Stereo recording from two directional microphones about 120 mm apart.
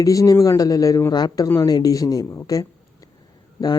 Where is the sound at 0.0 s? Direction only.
30° left (ahead or behind).